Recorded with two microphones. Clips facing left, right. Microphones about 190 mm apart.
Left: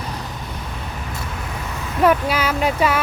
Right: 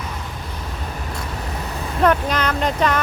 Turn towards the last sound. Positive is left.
turn(degrees=10)  # may be behind; listen again after turning